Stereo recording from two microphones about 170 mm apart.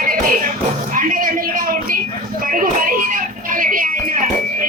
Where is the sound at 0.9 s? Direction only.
55° right (ahead or behind).